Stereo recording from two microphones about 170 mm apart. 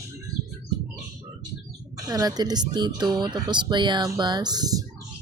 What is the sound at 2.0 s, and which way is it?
Speech, 20° right (ahead or behind).